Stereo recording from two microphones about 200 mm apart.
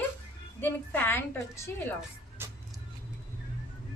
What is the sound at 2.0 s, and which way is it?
Vehicle, 5° right (ahead or behind).